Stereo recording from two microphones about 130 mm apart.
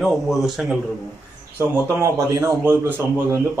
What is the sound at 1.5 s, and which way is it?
Speech, 20° right (ahead or behind).